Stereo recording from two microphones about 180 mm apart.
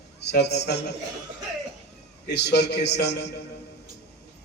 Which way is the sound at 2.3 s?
70° left (ahead or behind).